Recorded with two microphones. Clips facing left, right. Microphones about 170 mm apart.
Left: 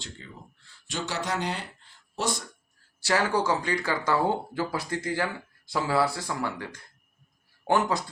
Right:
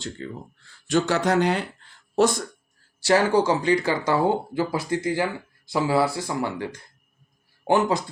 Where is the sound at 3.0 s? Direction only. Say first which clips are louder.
Right 6 dB; 25° right (ahead or behind).